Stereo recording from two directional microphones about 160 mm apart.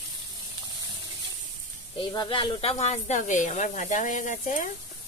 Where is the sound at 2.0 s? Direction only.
30° left (ahead or behind).